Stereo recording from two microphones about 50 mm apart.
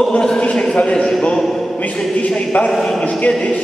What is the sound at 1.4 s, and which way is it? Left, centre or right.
Speech, centre.